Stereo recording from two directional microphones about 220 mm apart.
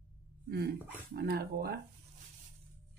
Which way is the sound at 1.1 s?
45° right (ahead or behind).